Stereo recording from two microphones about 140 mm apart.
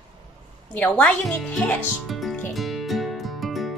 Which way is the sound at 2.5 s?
Centre (ahead or behind).